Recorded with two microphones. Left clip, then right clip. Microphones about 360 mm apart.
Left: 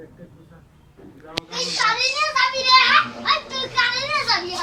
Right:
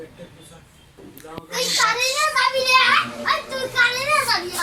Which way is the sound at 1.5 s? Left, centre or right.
Centre.